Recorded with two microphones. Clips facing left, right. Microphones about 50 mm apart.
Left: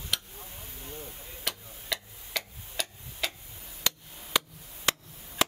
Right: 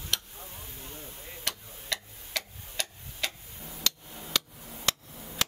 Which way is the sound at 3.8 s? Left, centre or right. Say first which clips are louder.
Left 1 dB; centre.